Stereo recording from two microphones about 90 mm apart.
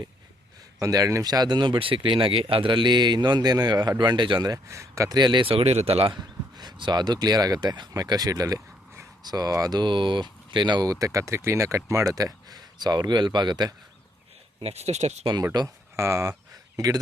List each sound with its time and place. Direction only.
0.8 s speech: 40° right (ahead or behind); by 4.5 s 60° right (ahead or behind)
4.5 s speech: 35° right (ahead or behind)
5.1 s speech: 55° right (ahead or behind); by 6.1 s 85° right
6.6 s speech: 55° right (ahead or behind)
11.0 s speech: 35° right (ahead or behind); by 13.7 s 55° right (ahead or behind)
15.5 s speech: 50° right (ahead or behind)
16.0 s speech: 35° right (ahead or behind)